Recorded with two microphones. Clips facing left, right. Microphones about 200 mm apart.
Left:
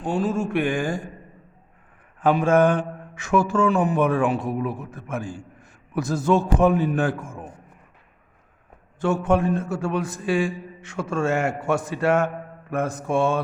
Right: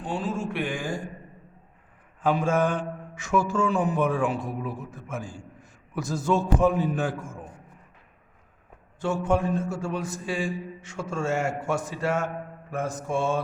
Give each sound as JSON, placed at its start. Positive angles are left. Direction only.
{"t": 0.0, "sound": "speech", "side_deg": 45}
{"t": 2.2, "sound": "a man's voice", "side_deg": 65}
{"t": 9.0, "sound": "a man's voice", "side_deg": 60}